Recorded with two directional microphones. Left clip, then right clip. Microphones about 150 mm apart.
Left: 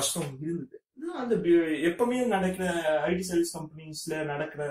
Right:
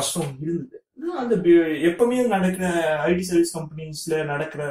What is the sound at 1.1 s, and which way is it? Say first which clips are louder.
Speech: right 7 dB; 25° left (ahead or behind).